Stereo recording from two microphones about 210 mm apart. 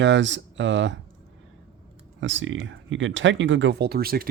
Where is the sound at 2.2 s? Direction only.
65° right (ahead or behind).